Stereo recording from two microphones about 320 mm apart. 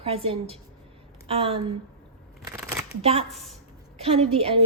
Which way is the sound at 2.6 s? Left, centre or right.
Centre.